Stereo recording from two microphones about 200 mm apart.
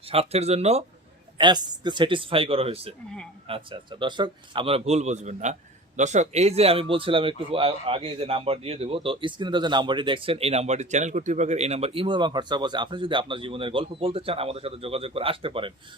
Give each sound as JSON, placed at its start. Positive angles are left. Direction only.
{"t": 0.1, "sound": "speech", "side_deg": -30}
{"t": 1.4, "sound": "speech", "side_deg": -20}